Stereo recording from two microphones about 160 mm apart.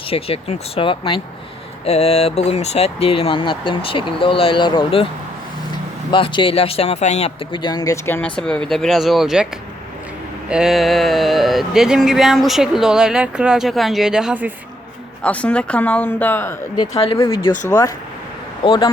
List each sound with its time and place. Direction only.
0.1 s speech: 35° left (ahead or behind)
6.1 s speech: 30° left (ahead or behind); by 9.5 s 5° right (ahead or behind)
10.5 s speech: 5° right (ahead or behind)
15.2 s speech: 10° left (ahead or behind); by 17.0 s 25° left (ahead or behind)
17.0 s speech: 35° left (ahead or behind)
17.2 s speech: 20° left (ahead or behind)
18.6 s speech: 30° left (ahead or behind)